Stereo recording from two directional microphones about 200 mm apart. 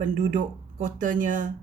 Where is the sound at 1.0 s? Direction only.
40° right (ahead or behind).